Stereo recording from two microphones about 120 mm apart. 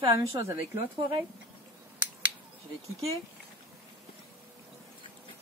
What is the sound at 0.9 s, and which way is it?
Speech, 45° right (ahead or behind).